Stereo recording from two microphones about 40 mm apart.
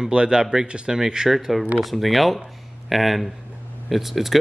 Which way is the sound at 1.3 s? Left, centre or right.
Centre.